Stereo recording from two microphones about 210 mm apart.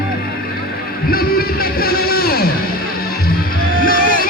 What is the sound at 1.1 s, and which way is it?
Music, 45° left (ahead or behind).